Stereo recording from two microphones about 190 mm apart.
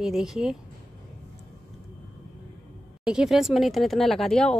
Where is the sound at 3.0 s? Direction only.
5° right (ahead or behind).